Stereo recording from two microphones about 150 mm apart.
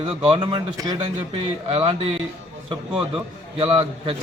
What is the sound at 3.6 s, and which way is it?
Speech, 35° right (ahead or behind).